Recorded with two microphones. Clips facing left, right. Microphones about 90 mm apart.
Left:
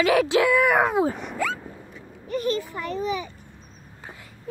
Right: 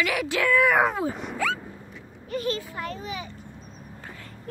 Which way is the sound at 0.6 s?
5° left (ahead or behind).